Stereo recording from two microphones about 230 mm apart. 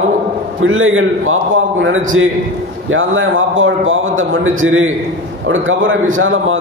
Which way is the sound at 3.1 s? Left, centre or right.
Right.